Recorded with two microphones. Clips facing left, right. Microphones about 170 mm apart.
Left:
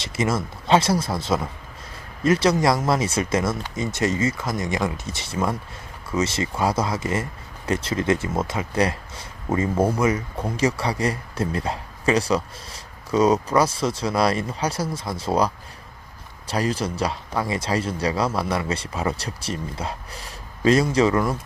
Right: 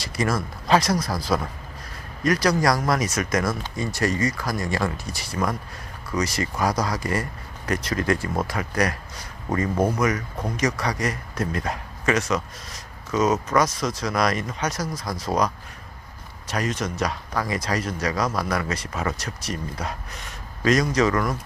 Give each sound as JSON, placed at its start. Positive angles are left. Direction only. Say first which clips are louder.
{"t": 0.0, "sound": "speech", "louder": "left 1 dB", "side_deg": 25}
{"t": 9.5, "sound": "speech", "louder": "left 2 dB", "side_deg": 5}
{"t": 9.9, "sound": "speech", "louder": "left 2 dB", "side_deg": 30}